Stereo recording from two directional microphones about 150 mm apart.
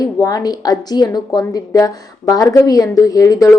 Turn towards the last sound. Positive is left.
turn(degrees=20)  # may be behind; listen again after turning